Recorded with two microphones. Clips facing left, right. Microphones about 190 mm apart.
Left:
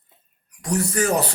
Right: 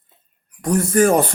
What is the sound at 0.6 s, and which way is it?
Speech, 55° right (ahead or behind).